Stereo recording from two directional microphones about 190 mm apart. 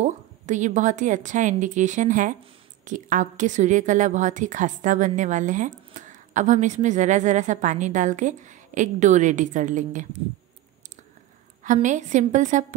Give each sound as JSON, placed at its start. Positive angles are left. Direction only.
{"t": 0.0, "sound": "a woman's voice", "side_deg": -40}
{"t": 11.6, "sound": "a woman's voice", "side_deg": -40}